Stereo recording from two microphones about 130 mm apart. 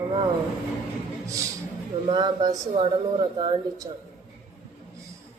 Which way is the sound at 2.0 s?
35° right (ahead or behind).